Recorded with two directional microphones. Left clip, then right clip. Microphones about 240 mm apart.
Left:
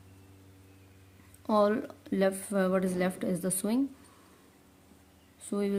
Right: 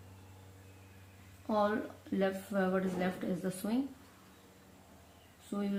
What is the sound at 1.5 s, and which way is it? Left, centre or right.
Speech, left.